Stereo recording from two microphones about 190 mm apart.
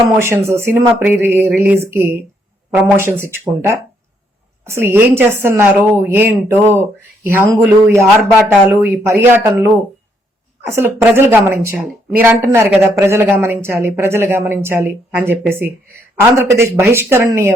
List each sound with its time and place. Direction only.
0.2 s speech: 15° right (ahead or behind)